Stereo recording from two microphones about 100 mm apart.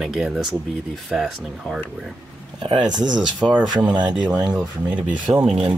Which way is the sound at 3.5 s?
15° right (ahead or behind).